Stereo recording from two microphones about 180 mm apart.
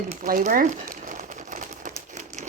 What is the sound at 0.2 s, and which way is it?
Crumpling, 45° right (ahead or behind).